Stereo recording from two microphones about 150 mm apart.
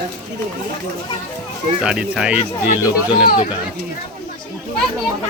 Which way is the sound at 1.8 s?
5° right (ahead or behind).